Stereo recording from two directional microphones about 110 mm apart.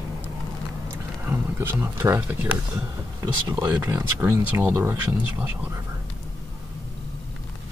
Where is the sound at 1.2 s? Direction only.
20° right (ahead or behind).